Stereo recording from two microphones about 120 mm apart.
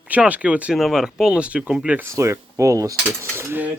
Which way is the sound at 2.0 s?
25° right (ahead or behind).